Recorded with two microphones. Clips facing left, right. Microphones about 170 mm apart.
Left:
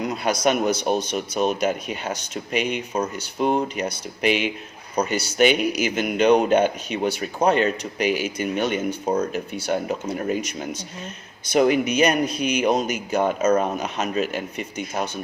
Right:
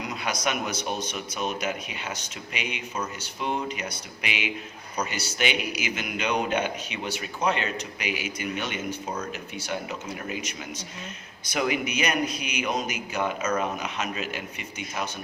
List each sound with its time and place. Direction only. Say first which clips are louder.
0.2 s speech: left 8 dB; 35° left (ahead or behind)
1.6 s a man's voice: left 8 dB; 50° left (ahead or behind)